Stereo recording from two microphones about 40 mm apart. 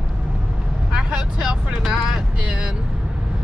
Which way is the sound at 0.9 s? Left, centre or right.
Right.